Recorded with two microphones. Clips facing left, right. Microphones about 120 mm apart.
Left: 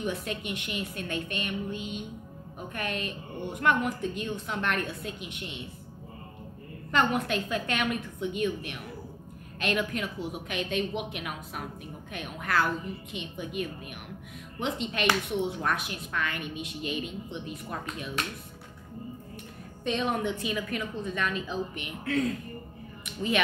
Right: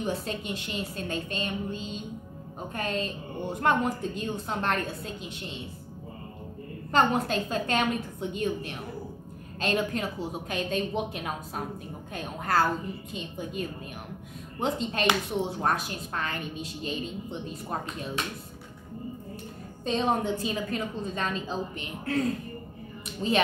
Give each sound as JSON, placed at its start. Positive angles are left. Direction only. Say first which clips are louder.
{"t": 0.0, "sound": "a woman's voice", "louder": "right 1 dB", "side_deg": -30}
{"t": 6.9, "sound": "a woman's voice", "louder": "right 2 dB", "side_deg": -35}
{"t": 19.8, "sound": "a woman's voice", "louder": "right 2 dB", "side_deg": -30}
{"t": 23.0, "sound": "a sound", "louder": "right 2 dB", "side_deg": -30}